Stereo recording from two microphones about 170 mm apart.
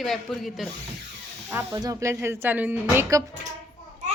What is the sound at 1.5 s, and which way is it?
A woman's voice, 20° right (ahead or behind).